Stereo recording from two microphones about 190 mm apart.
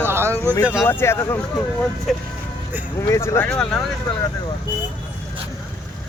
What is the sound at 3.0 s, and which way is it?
Speech, 15° left (ahead or behind).